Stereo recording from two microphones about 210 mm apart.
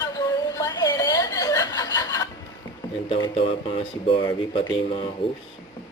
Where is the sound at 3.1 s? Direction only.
25° left (ahead or behind).